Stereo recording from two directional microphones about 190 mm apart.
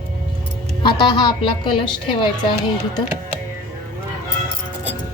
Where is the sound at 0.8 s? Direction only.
25° left (ahead or behind).